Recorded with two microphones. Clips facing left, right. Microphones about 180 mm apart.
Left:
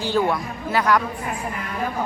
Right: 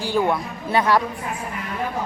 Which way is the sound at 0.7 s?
25° right (ahead or behind).